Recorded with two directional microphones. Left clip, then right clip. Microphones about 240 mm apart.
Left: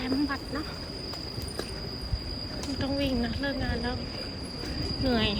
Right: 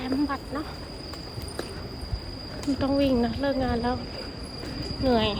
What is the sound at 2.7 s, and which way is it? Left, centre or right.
Speech, centre.